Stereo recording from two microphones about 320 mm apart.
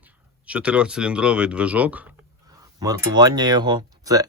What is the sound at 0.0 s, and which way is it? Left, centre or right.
Speech, centre.